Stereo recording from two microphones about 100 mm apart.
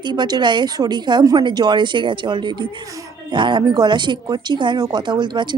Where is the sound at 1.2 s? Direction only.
35° right (ahead or behind).